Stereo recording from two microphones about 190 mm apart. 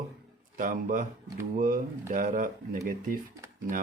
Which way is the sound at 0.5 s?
45° right (ahead or behind).